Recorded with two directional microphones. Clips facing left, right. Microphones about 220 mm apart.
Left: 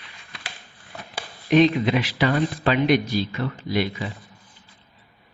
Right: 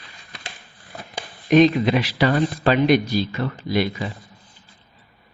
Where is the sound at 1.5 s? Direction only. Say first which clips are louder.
Right 2 dB; 40° right (ahead or behind).